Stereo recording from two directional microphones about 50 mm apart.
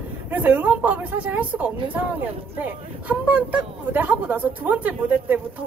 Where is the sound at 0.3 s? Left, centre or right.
Right.